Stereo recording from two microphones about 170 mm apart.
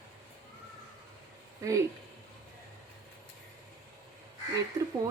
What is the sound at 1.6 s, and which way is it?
Speech, 15° right (ahead or behind).